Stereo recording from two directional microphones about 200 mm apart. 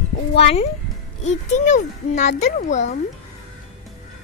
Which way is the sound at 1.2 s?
35° left (ahead or behind).